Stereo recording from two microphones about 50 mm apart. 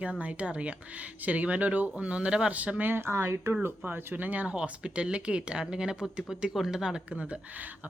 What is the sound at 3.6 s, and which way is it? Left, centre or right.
Speech, right.